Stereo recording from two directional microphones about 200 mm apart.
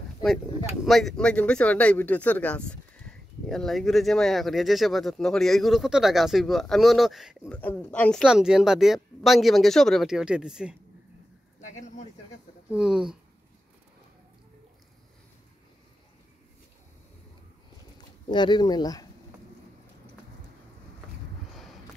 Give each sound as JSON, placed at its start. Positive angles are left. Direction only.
{"t": 0.8, "sound": "speech", "side_deg": 0}
{"t": 12.7, "sound": "speech", "side_deg": -5}
{"t": 17.9, "sound": "speech", "side_deg": 20}